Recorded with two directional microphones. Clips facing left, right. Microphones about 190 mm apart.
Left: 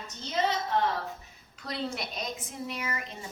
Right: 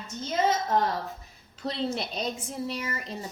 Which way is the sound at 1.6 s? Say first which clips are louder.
Right 4 dB; 30° right (ahead or behind).